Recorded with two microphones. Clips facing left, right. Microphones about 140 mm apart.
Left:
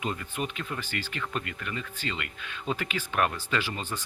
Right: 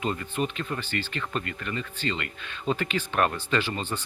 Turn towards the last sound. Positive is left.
turn(degrees=10)  # may be behind; listen again after turning